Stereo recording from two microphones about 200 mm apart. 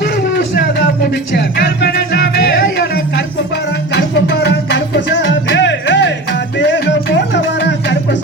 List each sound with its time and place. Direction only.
0.0 s music: 60° left (ahead or behind)